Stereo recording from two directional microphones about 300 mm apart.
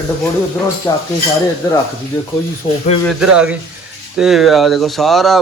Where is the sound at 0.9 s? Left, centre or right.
Centre.